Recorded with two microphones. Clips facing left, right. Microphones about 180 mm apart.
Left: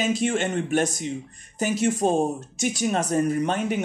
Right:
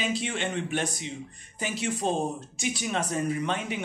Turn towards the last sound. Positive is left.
turn(degrees=45)  # may be behind; listen again after turning